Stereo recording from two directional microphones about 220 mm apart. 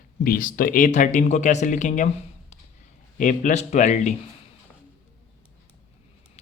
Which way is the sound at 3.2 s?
35° left (ahead or behind).